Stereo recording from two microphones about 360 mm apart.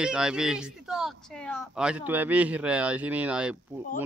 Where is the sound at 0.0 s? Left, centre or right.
Centre.